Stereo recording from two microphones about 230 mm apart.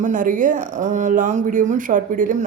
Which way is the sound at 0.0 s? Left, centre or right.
Right.